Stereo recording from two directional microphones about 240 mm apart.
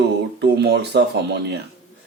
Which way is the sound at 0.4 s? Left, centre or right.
Right.